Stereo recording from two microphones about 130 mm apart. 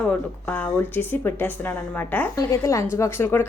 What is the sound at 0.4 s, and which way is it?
A woman's voice, 10° left (ahead or behind).